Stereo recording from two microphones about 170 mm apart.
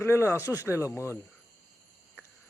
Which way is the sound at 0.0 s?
15° left (ahead or behind).